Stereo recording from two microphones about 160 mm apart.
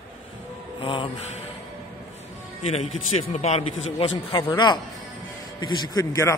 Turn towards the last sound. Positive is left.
turn(degrees=20)  # may be behind; listen again after turning